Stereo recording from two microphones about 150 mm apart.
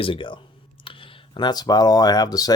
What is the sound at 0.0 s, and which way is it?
Speech, 35° left (ahead or behind).